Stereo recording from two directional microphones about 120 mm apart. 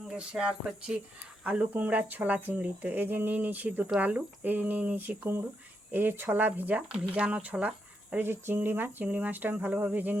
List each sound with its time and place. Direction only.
0.1 s speech: 10° right (ahead or behind)